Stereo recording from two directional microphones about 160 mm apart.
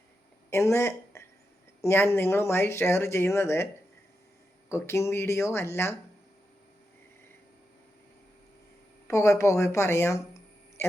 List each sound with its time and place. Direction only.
0.5 s speech: 15° left (ahead or behind)
4.7 s speech: 15° left (ahead or behind)
9.0 s speech: 20° left (ahead or behind)
10.8 s a sound: 15° left (ahead or behind)